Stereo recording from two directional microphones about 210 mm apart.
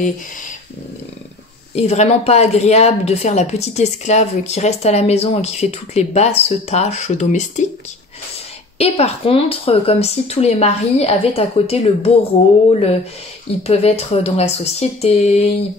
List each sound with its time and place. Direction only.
1.8 s a woman's voice: 30° left (ahead or behind)
8.7 s a woman's voice: 30° left (ahead or behind)
13.7 s speech: 30° left (ahead or behind)